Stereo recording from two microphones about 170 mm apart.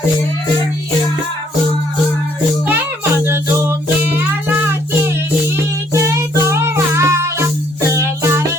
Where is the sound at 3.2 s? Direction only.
15° right (ahead or behind).